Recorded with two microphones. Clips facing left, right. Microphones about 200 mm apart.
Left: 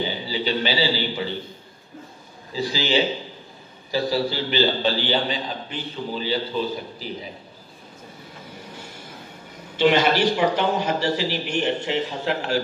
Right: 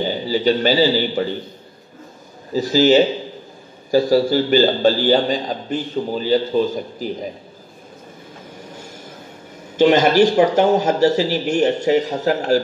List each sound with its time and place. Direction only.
0.0 s a man's voice: 45° right (ahead or behind)
2.5 s a man's voice: 45° right (ahead or behind)
8.7 s a sound: 45° right (ahead or behind)
9.8 s a man's voice: 45° right (ahead or behind)